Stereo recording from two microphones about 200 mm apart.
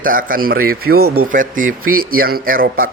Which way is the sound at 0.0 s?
45° right (ahead or behind).